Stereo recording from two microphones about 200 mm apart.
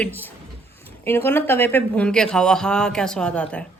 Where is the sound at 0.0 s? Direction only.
10° left (ahead or behind).